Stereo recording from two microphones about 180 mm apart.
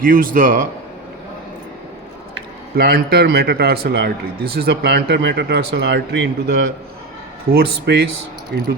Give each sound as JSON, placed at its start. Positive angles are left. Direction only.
{"t": 0.0, "sound": "a man's voice", "side_deg": -50}
{"t": 2.7, "sound": "a man's voice", "side_deg": -60}